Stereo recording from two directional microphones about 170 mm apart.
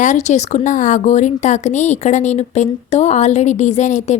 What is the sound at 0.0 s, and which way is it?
Speech, 45° left (ahead or behind).